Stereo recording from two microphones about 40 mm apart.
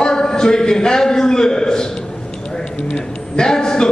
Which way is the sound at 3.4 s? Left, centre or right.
Centre.